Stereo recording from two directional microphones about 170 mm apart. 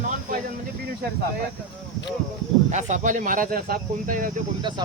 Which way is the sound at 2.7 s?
45° right (ahead or behind).